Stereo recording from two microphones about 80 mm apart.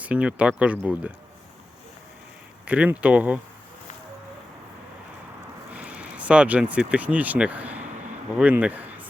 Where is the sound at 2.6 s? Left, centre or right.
Centre.